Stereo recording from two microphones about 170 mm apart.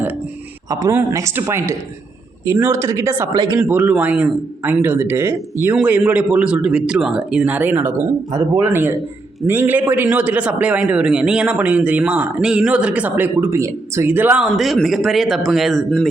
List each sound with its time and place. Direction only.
0.7 s a man's voice: 20° right (ahead or behind)
3.6 s a man's voice: 10° right (ahead or behind)